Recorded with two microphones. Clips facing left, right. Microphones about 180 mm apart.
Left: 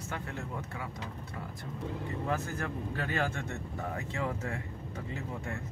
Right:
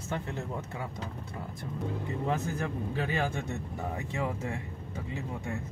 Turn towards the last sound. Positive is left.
turn(degrees=-15)  # may be behind; listen again after turning